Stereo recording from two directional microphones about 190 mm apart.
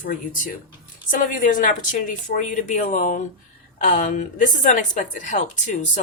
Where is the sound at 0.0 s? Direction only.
45° left (ahead or behind).